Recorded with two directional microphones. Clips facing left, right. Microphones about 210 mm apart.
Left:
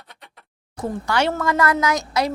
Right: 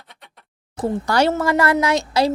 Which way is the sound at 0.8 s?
35° right (ahead or behind).